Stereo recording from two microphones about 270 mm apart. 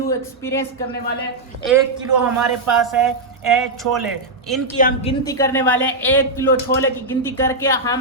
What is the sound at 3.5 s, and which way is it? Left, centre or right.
Speech, centre.